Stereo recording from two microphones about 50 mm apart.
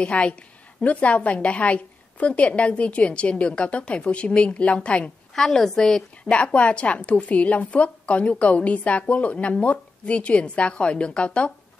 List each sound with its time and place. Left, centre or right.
0.0 s a woman's voice: left
5.3 s a woman's voice: centre
6.3 s a woman's voice: left